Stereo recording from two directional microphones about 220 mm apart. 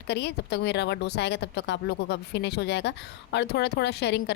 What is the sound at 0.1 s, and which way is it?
A woman's voice, 50° left (ahead or behind).